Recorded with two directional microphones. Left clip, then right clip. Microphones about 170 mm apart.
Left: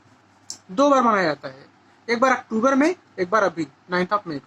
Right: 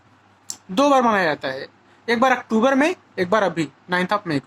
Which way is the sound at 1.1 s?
40° right (ahead or behind).